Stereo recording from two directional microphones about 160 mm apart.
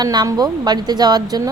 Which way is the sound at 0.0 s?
25° right (ahead or behind).